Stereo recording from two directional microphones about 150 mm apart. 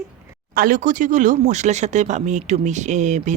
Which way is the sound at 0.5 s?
65° right (ahead or behind).